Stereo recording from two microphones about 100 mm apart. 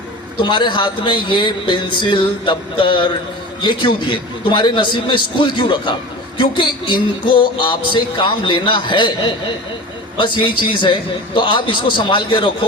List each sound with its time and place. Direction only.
0.3 s a man's voice: 50° left (ahead or behind)